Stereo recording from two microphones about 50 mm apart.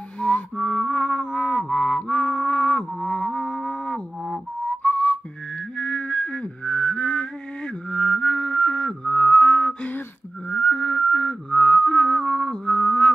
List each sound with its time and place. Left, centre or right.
0.2 s music: centre
3.3 s music: centre
4.8 s whistling: left
5.8 s a sound: left
10.5 s music: left